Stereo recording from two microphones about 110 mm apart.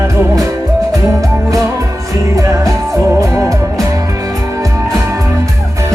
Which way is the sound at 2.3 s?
30° right (ahead or behind).